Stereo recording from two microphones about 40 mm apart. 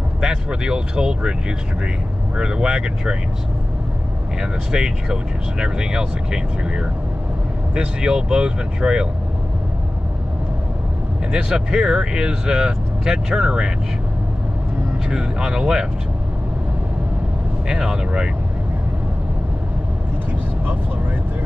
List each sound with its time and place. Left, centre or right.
0.3 s speech: right
2.3 s speech: centre
4.4 s speech: right
11.3 s speech: centre
15.0 s speech: centre
17.6 s speech: centre